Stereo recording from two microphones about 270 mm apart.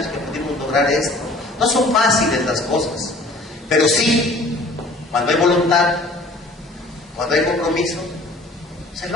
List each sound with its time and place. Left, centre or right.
0.0 s a man's voice: centre
7.2 s a man's voice: centre